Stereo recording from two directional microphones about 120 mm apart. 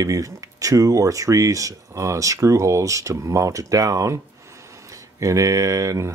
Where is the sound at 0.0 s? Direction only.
30° right (ahead or behind).